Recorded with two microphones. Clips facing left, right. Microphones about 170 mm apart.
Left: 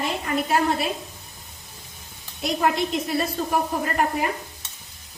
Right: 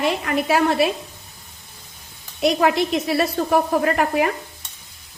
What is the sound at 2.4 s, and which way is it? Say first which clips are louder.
Speech: right 5 dB; 85° right.